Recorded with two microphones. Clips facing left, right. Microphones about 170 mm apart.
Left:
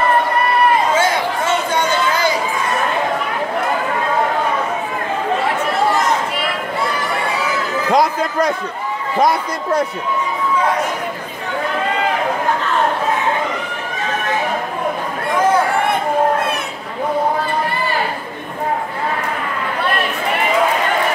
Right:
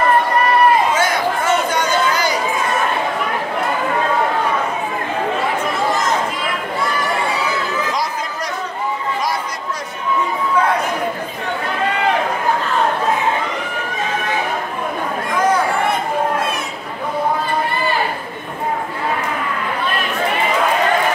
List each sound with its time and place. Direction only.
0.9 s a sound: 25° left (ahead or behind)
7.9 s chatter: 60° left (ahead or behind)
9.2 s a man's voice: 55° left (ahead or behind)